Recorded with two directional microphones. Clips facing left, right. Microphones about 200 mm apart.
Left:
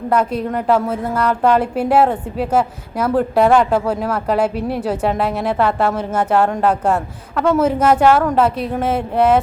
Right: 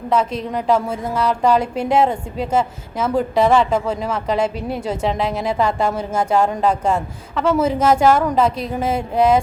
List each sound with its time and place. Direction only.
0.1 s a woman's voice: 10° left (ahead or behind)